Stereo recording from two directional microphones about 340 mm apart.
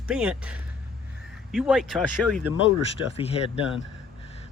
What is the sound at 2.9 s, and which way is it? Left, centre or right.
Speech, centre.